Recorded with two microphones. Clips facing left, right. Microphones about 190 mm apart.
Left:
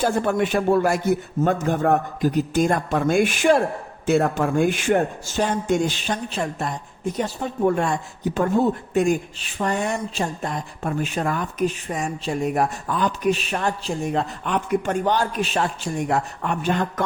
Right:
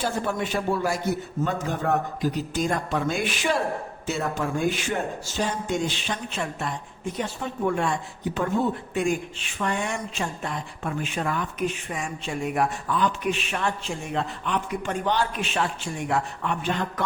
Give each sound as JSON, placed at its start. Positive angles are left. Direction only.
{"t": 0.0, "sound": "a man's voice", "side_deg": 55}